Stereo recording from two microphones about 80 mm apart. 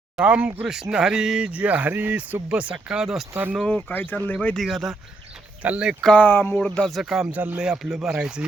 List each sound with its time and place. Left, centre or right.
0.2 s speech: centre
3.6 s speech: centre
4.5 s speech: centre
5.6 s speech: centre
6.1 s speech: left
6.7 s speech: centre
7.3 s speech: centre